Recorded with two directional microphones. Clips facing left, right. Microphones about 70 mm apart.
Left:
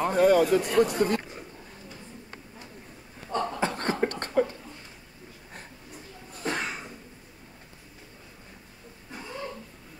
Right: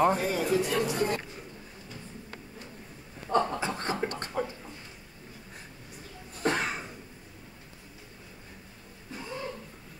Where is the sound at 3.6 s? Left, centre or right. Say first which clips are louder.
Left 4 dB; left.